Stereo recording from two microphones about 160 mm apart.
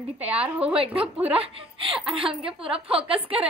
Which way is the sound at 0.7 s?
35° right (ahead or behind).